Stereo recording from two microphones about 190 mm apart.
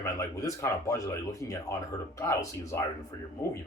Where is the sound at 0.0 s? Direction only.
15° left (ahead or behind).